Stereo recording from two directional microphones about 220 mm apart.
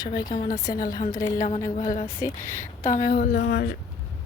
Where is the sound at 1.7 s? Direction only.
35° left (ahead or behind).